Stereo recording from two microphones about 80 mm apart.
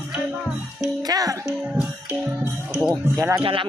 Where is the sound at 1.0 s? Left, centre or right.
Right.